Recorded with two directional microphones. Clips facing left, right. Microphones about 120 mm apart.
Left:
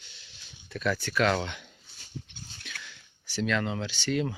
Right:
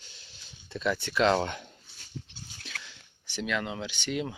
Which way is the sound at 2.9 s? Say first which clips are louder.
Left 1 dB; 20° right (ahead or behind).